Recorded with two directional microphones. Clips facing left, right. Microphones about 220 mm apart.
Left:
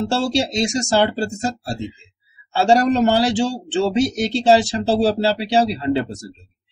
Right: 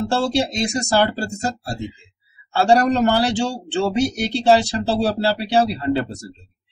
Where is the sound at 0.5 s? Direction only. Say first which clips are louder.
Left 2 dB; 20° left (ahead or behind).